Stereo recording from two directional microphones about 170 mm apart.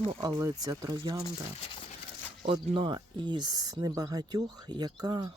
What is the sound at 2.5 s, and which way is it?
Speech, 30° right (ahead or behind).